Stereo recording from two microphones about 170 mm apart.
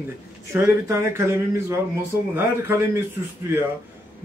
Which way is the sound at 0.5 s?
15° right (ahead or behind).